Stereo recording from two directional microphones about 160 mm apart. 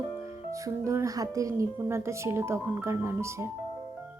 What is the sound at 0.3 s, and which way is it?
Speech, 20° right (ahead or behind).